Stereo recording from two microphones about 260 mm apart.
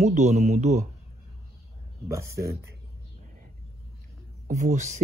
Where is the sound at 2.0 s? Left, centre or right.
Centre.